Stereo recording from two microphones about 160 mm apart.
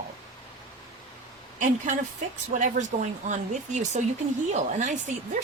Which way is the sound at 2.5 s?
50° right (ahead or behind).